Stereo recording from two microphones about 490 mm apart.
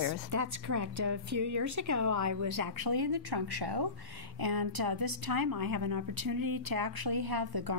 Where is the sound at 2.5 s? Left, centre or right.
Right.